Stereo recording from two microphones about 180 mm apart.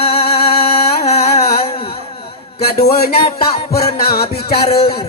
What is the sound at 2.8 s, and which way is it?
Music, 60° left (ahead or behind).